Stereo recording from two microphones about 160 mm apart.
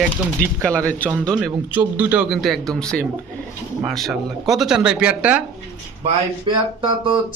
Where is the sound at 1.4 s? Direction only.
10° right (ahead or behind).